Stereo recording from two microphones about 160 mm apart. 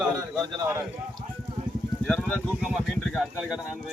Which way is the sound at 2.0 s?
5° left (ahead or behind).